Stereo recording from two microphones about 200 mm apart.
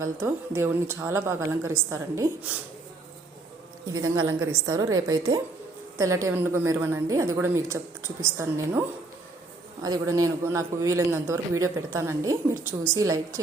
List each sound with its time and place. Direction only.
0.0 s a man's voice: 10° right (ahead or behind)
3.9 s a man's voice: 15° right (ahead or behind)
6.2 s a man's voice: 15° right (ahead or behind)
9.8 s a man's voice: 20° right (ahead or behind)